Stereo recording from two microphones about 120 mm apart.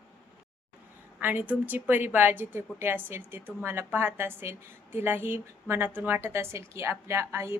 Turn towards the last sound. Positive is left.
turn(degrees=-20)  # may be behind; listen again after turning